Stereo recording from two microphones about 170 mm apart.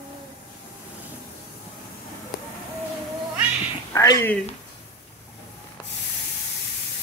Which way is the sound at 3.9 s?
20° left (ahead or behind).